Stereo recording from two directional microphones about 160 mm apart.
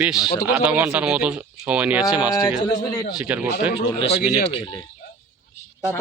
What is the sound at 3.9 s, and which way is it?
Speech, 40° left (ahead or behind).